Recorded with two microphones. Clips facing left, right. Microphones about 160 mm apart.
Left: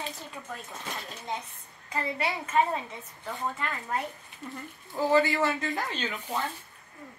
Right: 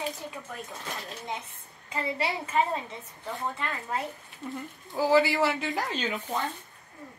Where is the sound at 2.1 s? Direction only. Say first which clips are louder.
Left 1 dB; 20° right (ahead or behind).